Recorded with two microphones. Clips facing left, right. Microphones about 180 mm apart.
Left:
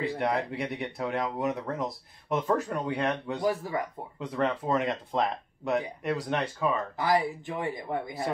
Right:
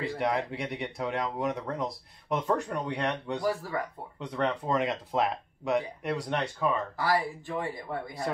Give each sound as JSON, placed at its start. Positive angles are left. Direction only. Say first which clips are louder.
{"t": 0.0, "sound": "speech", "louder": "left 1 dB", "side_deg": 0}
{"t": 3.3, "sound": "speech", "louder": "left 1 dB", "side_deg": 20}
{"t": 4.2, "sound": "speech", "louder": "left 1 dB", "side_deg": 0}
{"t": 7.0, "sound": "speech", "louder": "left 2 dB", "side_deg": 20}